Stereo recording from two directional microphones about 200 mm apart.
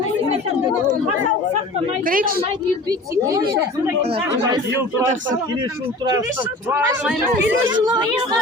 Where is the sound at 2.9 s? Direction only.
20° right (ahead or behind).